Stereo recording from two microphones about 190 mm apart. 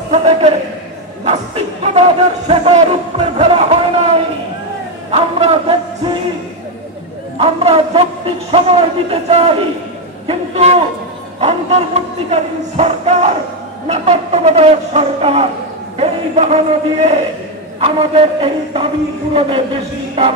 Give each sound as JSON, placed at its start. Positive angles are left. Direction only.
{"t": 0.1, "sound": "a man's voice", "side_deg": -30}
{"t": 7.3, "sound": "a man's voice", "side_deg": -30}
{"t": 17.7, "sound": "a sound", "side_deg": -30}